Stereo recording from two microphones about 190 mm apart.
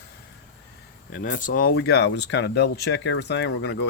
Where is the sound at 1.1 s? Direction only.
45° left (ahead or behind).